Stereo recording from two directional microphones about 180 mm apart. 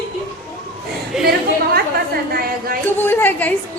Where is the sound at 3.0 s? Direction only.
10° left (ahead or behind).